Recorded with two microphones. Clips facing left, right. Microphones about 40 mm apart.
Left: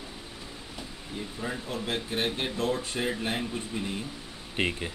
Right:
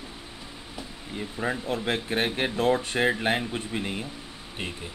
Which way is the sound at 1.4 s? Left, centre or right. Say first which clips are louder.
Right 6 dB; right.